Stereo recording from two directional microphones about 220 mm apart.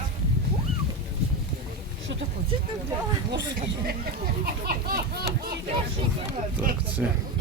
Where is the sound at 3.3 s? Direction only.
45° right (ahead or behind).